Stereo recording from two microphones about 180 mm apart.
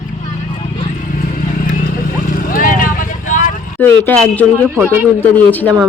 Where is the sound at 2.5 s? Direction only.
50° left (ahead or behind).